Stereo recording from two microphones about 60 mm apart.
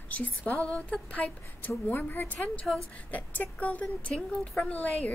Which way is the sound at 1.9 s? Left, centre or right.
Left.